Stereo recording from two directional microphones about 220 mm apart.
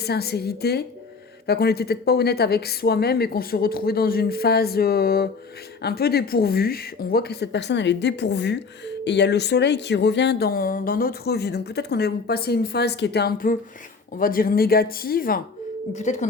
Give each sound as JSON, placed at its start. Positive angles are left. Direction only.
{"t": 0.0, "sound": "speech", "side_deg": 45}